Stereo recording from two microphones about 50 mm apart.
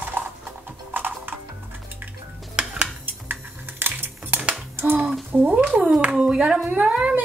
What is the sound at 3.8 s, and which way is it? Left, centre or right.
Music, right.